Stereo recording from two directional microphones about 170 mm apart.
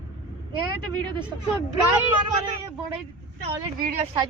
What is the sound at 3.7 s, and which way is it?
Speech, 55° right (ahead or behind).